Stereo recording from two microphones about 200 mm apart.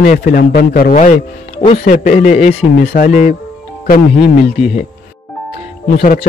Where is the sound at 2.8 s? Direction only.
45° left (ahead or behind).